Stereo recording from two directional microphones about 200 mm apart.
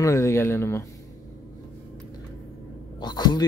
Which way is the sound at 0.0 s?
15° left (ahead or behind).